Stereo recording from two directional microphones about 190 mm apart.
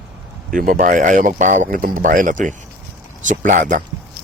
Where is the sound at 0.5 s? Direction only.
45° right (ahead or behind).